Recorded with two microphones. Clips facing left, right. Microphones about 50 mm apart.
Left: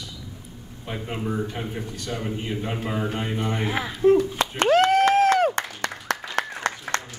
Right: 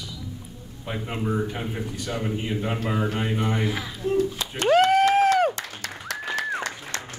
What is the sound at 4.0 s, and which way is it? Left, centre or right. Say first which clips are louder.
Speech: left 7 dB; left.